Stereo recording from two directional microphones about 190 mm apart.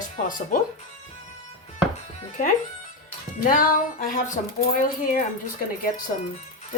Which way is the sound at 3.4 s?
45° left (ahead or behind).